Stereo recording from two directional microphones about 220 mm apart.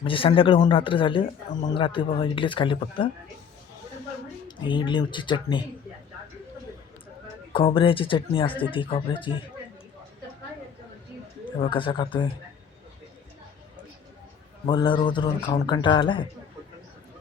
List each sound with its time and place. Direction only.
0.0 s speech: 25° left (ahead or behind)
4.4 s speech: 20° left (ahead or behind)
7.5 s speech: 25° left (ahead or behind)
11.6 s speech: 25° left (ahead or behind)
14.7 s speech: 20° left (ahead or behind)